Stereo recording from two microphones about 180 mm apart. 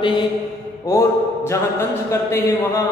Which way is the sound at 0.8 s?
15° left (ahead or behind).